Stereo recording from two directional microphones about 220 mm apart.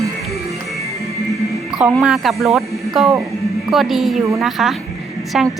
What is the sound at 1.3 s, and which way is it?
A woman's voice, centre (ahead or behind).